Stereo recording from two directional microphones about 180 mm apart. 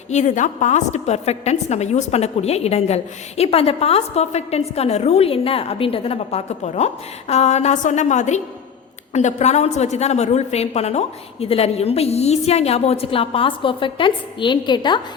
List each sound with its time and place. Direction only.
0.1 s a woman's voice: 40° left (ahead or behind); by 15.0 s 25° left (ahead or behind)